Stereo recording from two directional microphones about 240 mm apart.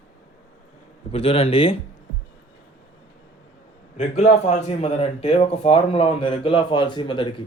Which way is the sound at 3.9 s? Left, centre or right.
Left.